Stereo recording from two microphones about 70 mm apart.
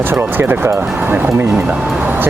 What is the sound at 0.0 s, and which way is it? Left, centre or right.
Speech, right.